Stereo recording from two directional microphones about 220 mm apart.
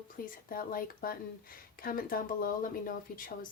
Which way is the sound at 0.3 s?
40° left (ahead or behind).